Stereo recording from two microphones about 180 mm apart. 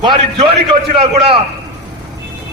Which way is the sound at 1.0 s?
35° right (ahead or behind).